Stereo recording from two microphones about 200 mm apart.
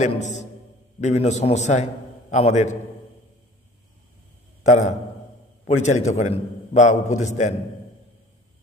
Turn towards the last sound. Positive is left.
turn(degrees=35)  # may be behind; listen again after turning